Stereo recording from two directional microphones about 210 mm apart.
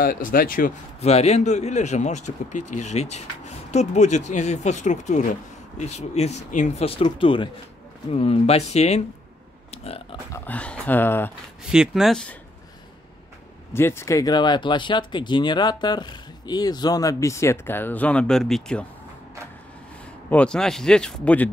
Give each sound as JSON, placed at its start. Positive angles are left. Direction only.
{"t": 0.0, "sound": "a man's voice", "side_deg": 40}
{"t": 9.7, "sound": "burping", "side_deg": 30}
{"t": 10.3, "sound": "speech", "side_deg": 10}
{"t": 11.7, "sound": "speech", "side_deg": 0}
{"t": 13.7, "sound": "speech", "side_deg": 10}
{"t": 20.2, "sound": "speech", "side_deg": 5}